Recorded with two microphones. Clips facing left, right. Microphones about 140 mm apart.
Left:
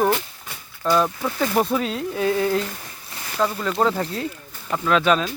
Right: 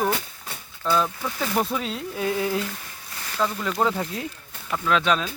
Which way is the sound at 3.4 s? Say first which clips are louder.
Left 3 dB; 15° left (ahead or behind).